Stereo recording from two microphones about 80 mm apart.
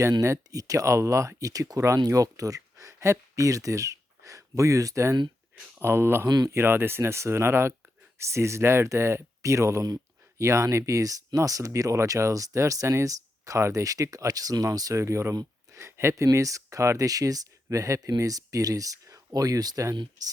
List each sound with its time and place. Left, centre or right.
0.2 s speech: right
5.8 s speech: right
6.2 s speech: right
6.5 s speech: right
15.7 s a sound: right
16.2 s speech: right